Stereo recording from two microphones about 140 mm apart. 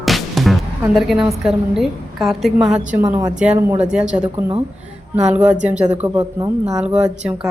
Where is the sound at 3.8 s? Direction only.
5° right (ahead or behind).